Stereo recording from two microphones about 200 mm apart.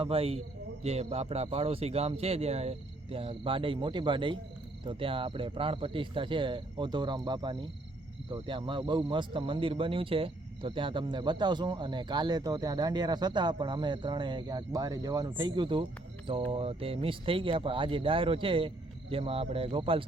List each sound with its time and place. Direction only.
0.0 s speech: 30° right (ahead or behind)